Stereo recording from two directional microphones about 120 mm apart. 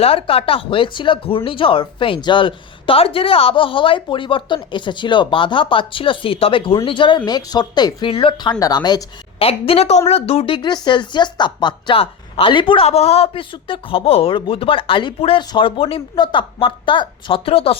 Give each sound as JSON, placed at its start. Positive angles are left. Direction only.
{"t": 0.0, "sound": "speech", "side_deg": 50}
{"t": 8.1, "sound": "speech", "side_deg": 45}
{"t": 9.4, "sound": "a woman's voice", "side_deg": 55}